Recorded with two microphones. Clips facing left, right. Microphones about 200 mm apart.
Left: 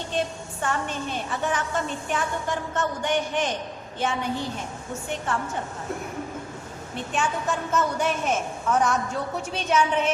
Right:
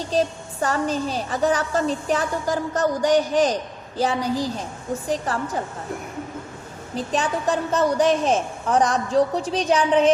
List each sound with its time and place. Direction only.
0.1 s a woman's voice: 40° right (ahead or behind)
6.9 s a woman's voice: 35° right (ahead or behind)